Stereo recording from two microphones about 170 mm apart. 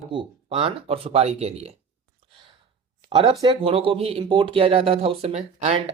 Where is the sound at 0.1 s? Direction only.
30° right (ahead or behind).